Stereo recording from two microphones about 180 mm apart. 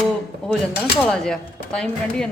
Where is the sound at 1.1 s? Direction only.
5° left (ahead or behind).